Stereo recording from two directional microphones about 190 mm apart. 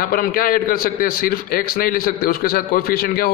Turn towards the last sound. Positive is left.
turn(degrees=50)  # may be behind; listen again after turning